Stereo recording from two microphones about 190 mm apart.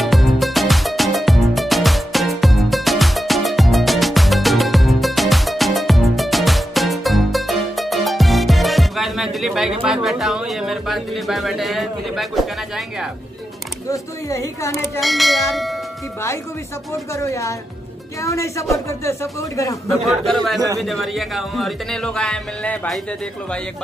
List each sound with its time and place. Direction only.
0.0 s music: centre (ahead or behind)
13.8 s speech: 15° left (ahead or behind)
15.0 s speech: centre (ahead or behind)
17.1 s speech: 15° left (ahead or behind)
20.1 s speech: centre (ahead or behind)